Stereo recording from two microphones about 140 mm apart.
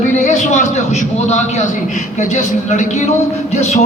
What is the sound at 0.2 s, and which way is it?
A man's voice, 60° left (ahead or behind).